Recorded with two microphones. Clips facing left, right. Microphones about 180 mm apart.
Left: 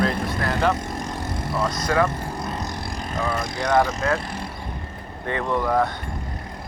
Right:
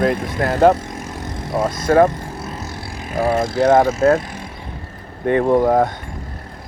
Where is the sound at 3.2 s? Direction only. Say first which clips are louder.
Right 11 dB; 40° right (ahead or behind).